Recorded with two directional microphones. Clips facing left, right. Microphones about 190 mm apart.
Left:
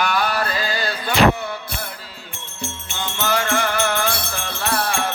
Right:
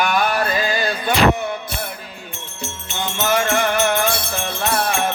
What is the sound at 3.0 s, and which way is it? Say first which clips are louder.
Music: right 3 dB; 20° right (ahead or behind).